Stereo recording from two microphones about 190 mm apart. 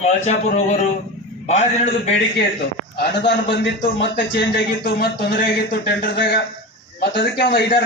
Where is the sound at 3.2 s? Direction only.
65° left (ahead or behind).